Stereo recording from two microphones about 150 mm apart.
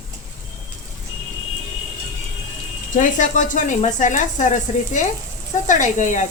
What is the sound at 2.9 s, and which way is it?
Speech, 60° left (ahead or behind).